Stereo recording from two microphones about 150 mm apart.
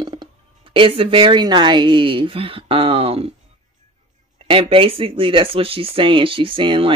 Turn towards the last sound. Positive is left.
turn(degrees=-35)  # may be behind; listen again after turning